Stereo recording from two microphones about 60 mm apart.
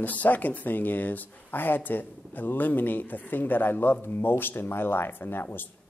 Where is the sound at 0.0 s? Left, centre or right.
Left.